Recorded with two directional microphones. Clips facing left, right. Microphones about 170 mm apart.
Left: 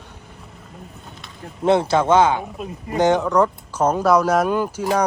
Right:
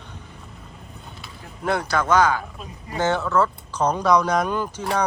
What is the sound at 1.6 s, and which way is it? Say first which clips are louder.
Speech: left 6 dB; 25° left (ahead or behind).